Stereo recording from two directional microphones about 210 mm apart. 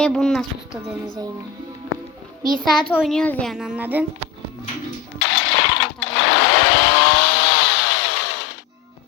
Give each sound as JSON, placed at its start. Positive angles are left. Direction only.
{"t": 0.0, "sound": "speech", "side_deg": 5}
{"t": 2.5, "sound": "speech", "side_deg": 0}
{"t": 5.2, "sound": "chainsaw", "side_deg": 60}